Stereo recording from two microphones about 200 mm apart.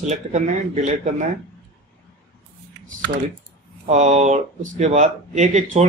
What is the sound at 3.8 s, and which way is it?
Speech, 35° right (ahead or behind).